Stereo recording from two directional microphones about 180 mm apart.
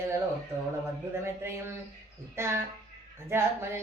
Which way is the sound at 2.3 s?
15° right (ahead or behind).